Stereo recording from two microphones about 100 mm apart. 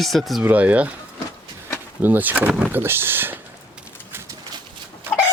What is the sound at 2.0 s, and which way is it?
Speech, 20° right (ahead or behind).